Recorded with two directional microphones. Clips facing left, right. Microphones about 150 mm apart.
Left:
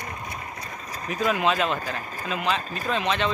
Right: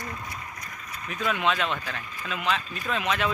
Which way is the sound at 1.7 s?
40° left (ahead or behind).